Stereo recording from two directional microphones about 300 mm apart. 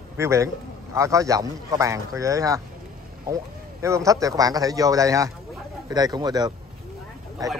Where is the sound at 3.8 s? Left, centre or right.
Centre.